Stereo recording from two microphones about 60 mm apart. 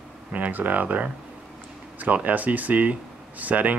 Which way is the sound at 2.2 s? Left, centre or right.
Right.